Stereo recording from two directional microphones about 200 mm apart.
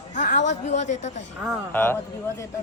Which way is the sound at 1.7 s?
10° left (ahead or behind).